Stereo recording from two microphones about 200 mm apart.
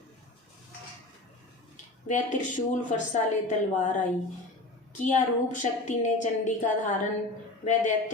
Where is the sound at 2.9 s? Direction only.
35° left (ahead or behind).